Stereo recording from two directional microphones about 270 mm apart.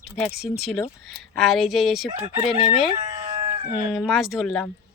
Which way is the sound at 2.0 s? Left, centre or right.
Centre.